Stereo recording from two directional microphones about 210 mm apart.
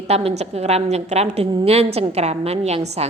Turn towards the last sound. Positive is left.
turn(degrees=-30)  # may be behind; listen again after turning